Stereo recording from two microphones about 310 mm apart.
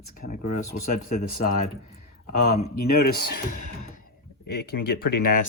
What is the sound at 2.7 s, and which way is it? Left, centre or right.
Speech, left.